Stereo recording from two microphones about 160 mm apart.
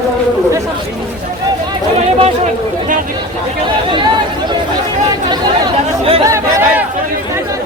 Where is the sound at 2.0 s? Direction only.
40° right (ahead or behind).